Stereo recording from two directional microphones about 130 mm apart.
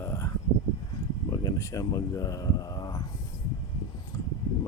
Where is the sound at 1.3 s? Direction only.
25° left (ahead or behind).